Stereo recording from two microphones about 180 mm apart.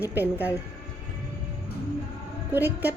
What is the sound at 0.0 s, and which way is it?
Speech, 10° right (ahead or behind).